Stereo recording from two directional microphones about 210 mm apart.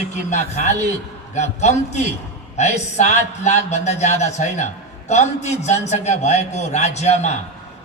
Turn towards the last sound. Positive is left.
turn(degrees=30)  # may be behind; listen again after turning